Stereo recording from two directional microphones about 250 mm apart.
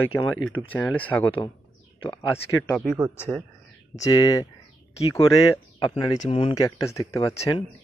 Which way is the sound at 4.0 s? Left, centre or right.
Centre.